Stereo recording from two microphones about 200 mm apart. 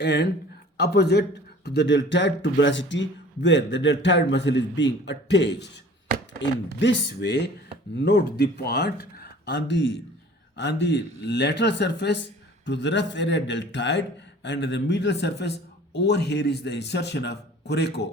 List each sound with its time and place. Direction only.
0.0 s speech: 55° left (ahead or behind)